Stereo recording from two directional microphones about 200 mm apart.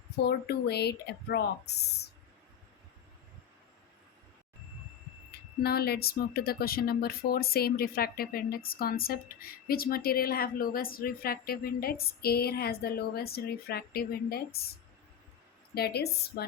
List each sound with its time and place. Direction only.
0.3 s speech: 55° left (ahead or behind)
5.6 s speech: 50° left (ahead or behind)
15.7 s speech: 55° left (ahead or behind)